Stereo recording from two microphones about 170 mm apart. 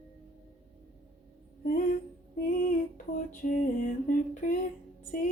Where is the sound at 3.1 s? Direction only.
50° left (ahead or behind).